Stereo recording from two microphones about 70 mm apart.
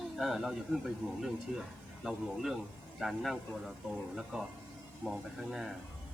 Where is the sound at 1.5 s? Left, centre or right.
Centre.